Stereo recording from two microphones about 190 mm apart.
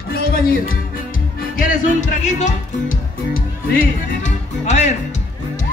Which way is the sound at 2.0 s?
40° left (ahead or behind).